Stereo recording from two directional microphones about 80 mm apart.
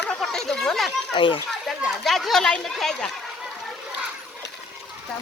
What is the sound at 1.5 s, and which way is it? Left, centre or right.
Speech, centre.